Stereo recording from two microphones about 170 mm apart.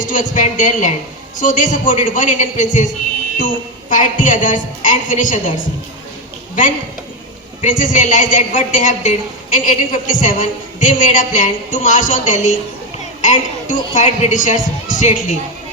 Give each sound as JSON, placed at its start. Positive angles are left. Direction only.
{"t": 0.1, "sound": "a woman's voice", "side_deg": 50}
{"t": 7.6, "sound": "a woman's voice", "side_deg": 50}